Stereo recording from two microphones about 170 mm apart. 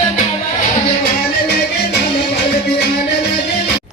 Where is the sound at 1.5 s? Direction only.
75° left (ahead or behind).